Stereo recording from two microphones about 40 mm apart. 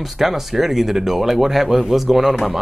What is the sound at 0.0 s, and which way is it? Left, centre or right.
A man's voice, centre.